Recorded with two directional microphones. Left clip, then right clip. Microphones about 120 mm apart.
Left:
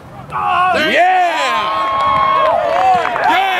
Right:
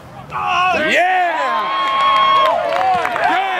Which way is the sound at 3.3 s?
35° left (ahead or behind).